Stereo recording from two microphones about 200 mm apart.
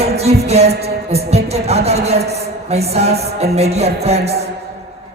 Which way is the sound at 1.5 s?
30° right (ahead or behind).